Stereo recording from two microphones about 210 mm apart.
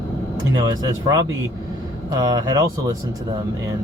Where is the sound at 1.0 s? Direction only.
20° right (ahead or behind).